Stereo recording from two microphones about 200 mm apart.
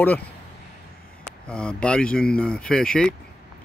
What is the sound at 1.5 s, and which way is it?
Speech, 5° left (ahead or behind).